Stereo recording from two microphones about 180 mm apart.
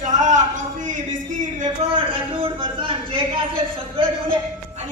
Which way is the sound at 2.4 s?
30° right (ahead or behind).